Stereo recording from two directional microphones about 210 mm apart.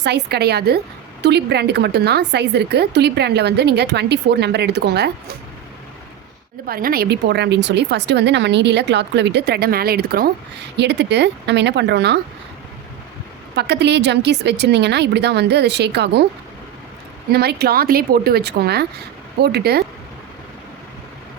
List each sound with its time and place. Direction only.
0.0 s a woman's voice: 50° right (ahead or behind)
6.7 s a woman's voice: 45° right (ahead or behind)
13.6 s a woman's voice: 50° right (ahead or behind)
17.3 s a woman's voice: 50° right (ahead or behind)